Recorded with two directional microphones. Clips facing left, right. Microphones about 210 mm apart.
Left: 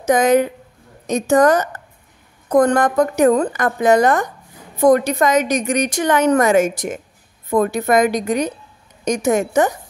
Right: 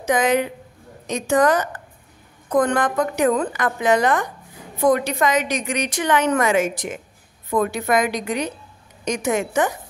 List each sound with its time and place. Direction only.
0.0 s a woman's voice: 45° left (ahead or behind)